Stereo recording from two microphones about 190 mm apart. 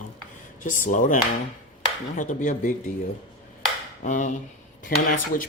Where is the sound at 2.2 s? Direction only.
45° left (ahead or behind).